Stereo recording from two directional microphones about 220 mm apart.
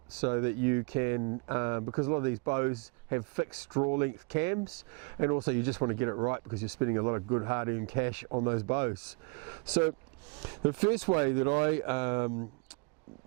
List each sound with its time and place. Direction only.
0.2 s speech: 15° right (ahead or behind)
5.5 s speech: 10° right (ahead or behind)
8.3 s speech: 25° right (ahead or behind)
10.8 s speech: 10° right (ahead or behind)